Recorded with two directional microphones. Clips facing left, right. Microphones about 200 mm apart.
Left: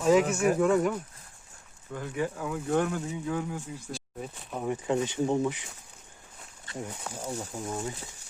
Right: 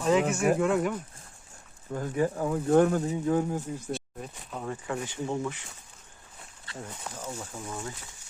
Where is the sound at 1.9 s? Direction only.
40° right (ahead or behind).